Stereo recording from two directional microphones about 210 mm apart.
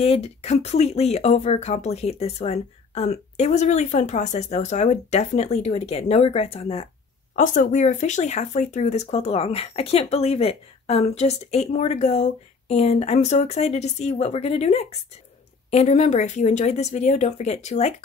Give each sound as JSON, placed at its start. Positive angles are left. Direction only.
{"t": 0.0, "sound": "speech", "side_deg": 30}